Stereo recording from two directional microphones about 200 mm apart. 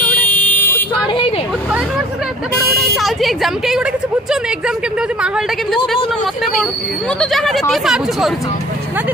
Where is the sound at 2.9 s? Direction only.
Centre (ahead or behind).